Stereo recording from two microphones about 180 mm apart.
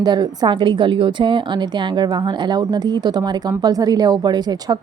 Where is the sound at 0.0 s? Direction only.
25° right (ahead or behind).